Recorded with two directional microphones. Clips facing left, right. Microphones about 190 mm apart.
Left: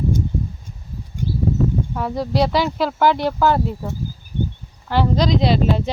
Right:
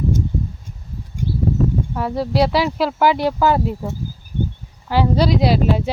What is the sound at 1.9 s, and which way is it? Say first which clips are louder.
Speech: right 1 dB; centre (ahead or behind).